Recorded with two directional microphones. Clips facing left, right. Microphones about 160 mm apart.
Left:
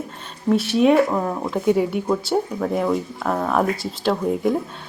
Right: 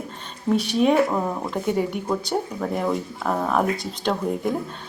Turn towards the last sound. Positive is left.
turn(degrees=0)  # may be behind; listen again after turning